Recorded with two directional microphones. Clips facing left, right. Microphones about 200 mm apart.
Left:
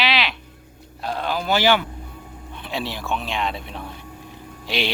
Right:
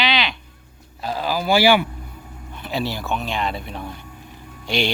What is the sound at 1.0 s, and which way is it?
Speech, 5° right (ahead or behind).